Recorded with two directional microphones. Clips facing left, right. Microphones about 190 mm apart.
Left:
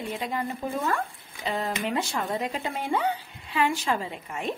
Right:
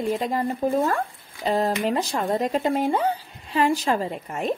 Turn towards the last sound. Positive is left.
turn(degrees=-40)  # may be behind; listen again after turning